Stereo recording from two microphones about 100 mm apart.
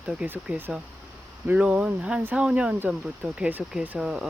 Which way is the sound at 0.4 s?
15° right (ahead or behind).